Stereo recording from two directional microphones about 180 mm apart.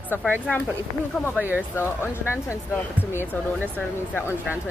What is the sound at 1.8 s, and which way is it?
Speech, 15° left (ahead or behind).